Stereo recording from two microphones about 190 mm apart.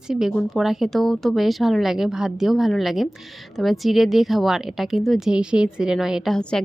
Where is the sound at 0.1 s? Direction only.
Centre (ahead or behind).